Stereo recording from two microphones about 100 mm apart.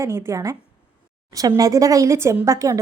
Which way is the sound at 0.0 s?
30° right (ahead or behind).